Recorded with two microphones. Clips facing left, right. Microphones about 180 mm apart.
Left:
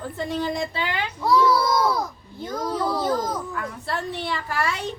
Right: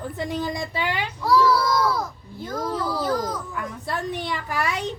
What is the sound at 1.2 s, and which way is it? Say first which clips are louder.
Child singing: even; 20° left (ahead or behind).